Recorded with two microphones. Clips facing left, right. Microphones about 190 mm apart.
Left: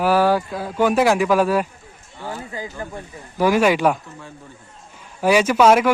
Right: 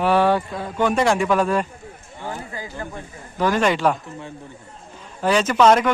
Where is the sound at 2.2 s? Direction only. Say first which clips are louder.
Even; 15° right (ahead or behind).